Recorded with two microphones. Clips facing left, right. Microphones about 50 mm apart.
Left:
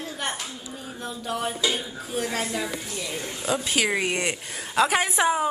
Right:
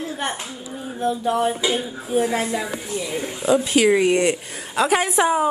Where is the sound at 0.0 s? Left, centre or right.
Centre.